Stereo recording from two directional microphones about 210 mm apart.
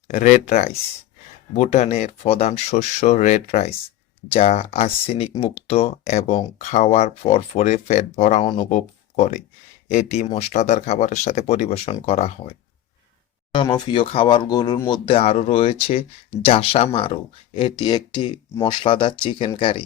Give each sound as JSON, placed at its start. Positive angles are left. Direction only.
{"t": 0.1, "sound": "speech", "side_deg": 35}